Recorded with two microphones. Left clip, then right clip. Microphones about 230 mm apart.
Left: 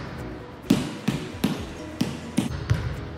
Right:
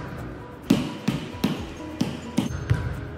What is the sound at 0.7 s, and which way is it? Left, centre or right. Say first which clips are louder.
Basketball bounce: right 1 dB; centre.